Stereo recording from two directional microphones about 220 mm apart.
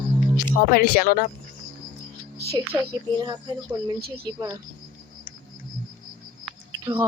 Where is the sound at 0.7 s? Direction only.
40° left (ahead or behind).